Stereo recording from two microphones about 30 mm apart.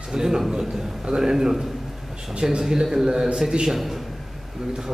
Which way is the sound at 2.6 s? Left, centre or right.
Centre.